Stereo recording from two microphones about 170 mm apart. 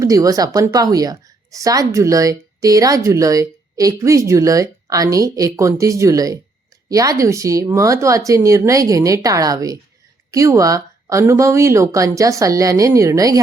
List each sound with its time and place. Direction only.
0.0 s a woman's voice: 20° right (ahead or behind)